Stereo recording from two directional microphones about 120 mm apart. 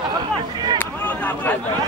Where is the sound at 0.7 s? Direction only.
15° left (ahead or behind).